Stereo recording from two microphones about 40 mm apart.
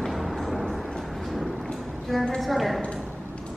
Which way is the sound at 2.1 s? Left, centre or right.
Centre.